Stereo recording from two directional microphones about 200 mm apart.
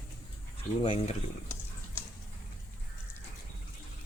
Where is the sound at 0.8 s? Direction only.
30° left (ahead or behind).